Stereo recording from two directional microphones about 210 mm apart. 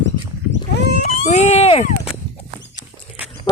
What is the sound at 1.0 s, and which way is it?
Speech, 30° left (ahead or behind).